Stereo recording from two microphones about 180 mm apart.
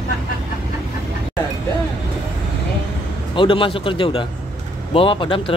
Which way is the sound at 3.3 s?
30° left (ahead or behind).